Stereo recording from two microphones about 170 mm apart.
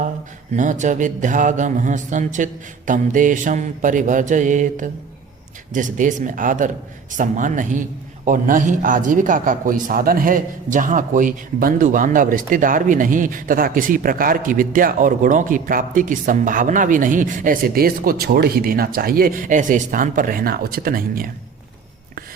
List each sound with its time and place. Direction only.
0.5 s a man's voice: 45° right (ahead or behind)